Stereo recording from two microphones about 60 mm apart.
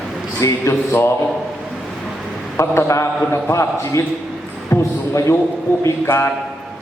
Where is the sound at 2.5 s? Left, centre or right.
Left.